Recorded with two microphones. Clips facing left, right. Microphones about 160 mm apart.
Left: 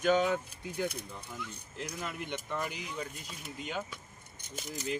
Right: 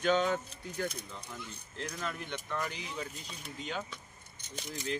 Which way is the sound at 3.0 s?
Centre (ahead or behind).